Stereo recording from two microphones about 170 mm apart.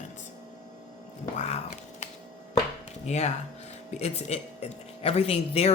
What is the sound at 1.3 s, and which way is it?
Speech, 40° left (ahead or behind).